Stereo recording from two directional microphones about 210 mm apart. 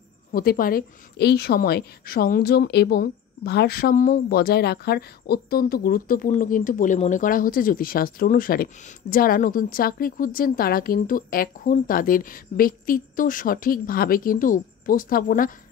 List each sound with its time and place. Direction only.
0.3 s a woman's voice: 45° left (ahead or behind)